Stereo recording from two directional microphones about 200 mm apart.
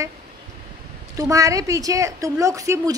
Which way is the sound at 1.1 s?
15° right (ahead or behind).